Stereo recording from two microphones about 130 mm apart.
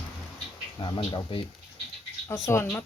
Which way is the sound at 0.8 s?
35° left (ahead or behind).